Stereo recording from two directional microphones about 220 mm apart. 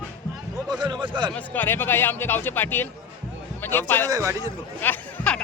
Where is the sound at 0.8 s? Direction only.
20° right (ahead or behind).